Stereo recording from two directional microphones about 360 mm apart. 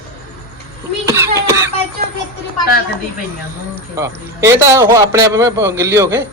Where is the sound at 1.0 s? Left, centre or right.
Centre.